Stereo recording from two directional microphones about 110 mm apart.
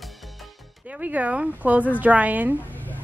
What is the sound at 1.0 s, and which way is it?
A woman's voice, 10° right (ahead or behind).